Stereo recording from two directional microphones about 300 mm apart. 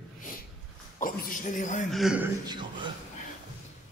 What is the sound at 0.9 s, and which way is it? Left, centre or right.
Speech, left.